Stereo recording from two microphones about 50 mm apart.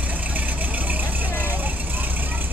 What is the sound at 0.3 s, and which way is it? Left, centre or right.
Vehicle, right.